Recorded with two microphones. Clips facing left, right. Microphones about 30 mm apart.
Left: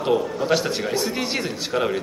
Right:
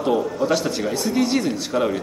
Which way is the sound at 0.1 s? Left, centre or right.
Centre.